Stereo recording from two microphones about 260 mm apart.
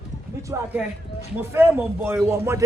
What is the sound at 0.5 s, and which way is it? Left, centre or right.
A man's voice, centre.